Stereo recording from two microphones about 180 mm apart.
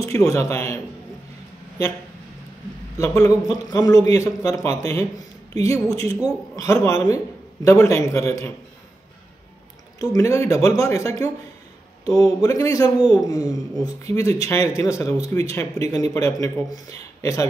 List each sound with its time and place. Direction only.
0.0 s a man's voice: 20° left (ahead or behind)
3.0 s a man's voice: 15° left (ahead or behind)
9.9 s a man's voice: 20° left (ahead or behind)